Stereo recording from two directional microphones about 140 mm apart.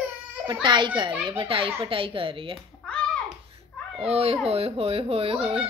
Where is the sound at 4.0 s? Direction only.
45° right (ahead or behind).